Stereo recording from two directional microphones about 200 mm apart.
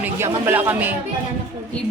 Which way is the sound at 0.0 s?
10° right (ahead or behind).